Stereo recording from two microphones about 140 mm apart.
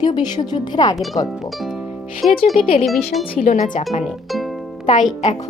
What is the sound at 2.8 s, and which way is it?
Speech, centre (ahead or behind).